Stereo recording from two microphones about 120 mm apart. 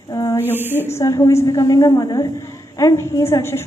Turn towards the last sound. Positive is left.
turn(degrees=20)  # may be behind; listen again after turning